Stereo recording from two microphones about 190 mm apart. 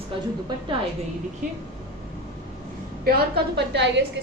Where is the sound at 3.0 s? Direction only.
55° right (ahead or behind).